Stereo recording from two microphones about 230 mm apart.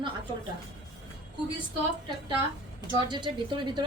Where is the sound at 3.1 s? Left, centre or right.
Centre.